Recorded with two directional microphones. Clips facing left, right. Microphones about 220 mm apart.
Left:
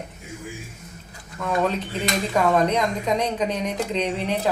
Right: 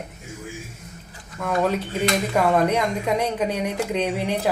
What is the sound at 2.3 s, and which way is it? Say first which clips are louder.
Speech: left 1 dB; 10° right (ahead or behind).